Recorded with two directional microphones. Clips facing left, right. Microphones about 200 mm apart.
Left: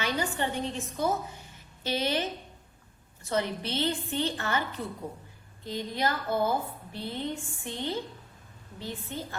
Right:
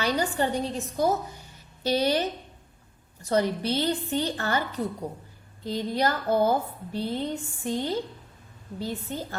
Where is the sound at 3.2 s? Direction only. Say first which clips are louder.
Right 6 dB; 40° right (ahead or behind).